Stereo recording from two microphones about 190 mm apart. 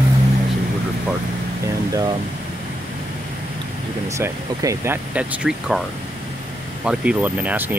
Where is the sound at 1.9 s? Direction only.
20° right (ahead or behind).